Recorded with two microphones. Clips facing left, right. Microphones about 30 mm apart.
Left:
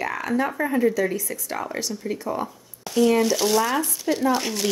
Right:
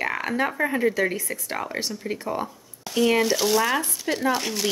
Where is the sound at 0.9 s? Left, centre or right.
Right.